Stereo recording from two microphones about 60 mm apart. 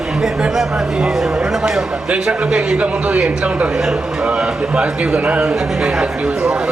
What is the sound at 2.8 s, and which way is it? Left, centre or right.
A man's voice, right.